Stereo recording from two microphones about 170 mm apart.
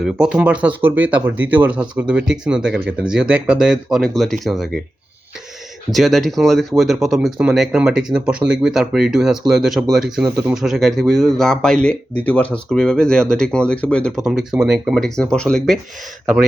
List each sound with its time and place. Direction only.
0.0 s speech: 5° right (ahead or behind)
5.9 s speech: centre (ahead or behind)